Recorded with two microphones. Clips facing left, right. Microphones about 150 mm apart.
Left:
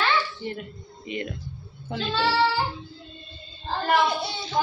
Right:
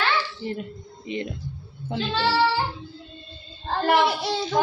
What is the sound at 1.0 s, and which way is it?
Speech, 30° right (ahead or behind).